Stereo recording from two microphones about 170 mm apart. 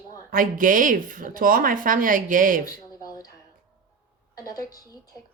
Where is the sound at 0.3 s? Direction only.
55° right (ahead or behind).